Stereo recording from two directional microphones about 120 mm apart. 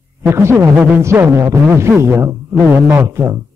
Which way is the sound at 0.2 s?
20° right (ahead or behind).